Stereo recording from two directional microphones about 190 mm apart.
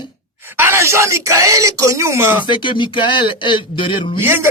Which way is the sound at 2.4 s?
25° left (ahead or behind).